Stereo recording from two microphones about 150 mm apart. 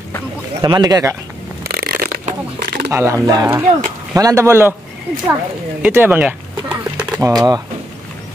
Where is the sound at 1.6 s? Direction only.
90° right.